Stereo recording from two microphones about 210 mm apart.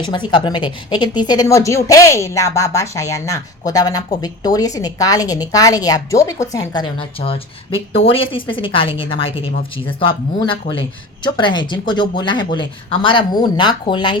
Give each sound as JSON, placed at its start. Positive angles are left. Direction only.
{"t": 0.0, "sound": "a woman's voice", "side_deg": 20}